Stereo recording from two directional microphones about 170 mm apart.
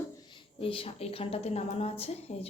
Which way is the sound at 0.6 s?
35° left (ahead or behind).